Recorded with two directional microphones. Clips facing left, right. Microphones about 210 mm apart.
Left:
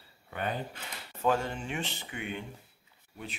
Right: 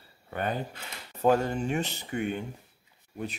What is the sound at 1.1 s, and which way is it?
Speech, 40° right (ahead or behind).